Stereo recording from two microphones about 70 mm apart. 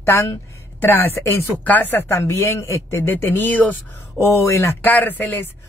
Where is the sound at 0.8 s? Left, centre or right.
Left.